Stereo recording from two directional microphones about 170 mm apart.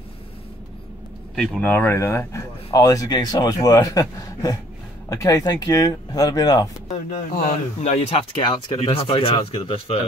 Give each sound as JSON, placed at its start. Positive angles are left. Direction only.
{"t": 1.3, "sound": "speech", "side_deg": 5}
{"t": 7.4, "sound": "speech", "side_deg": 40}